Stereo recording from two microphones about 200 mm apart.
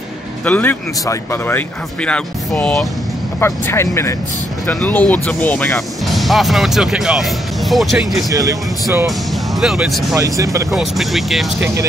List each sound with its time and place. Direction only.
0.5 s speech: 10° left (ahead or behind)
8.3 s speech: 15° right (ahead or behind)
9.6 s speech: centre (ahead or behind)
10.1 s speech: 15° right (ahead or behind)
10.7 s speech: centre (ahead or behind)